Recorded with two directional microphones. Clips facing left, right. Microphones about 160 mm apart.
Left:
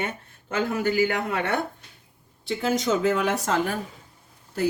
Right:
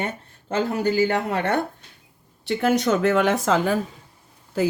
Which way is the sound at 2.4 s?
60° right (ahead or behind).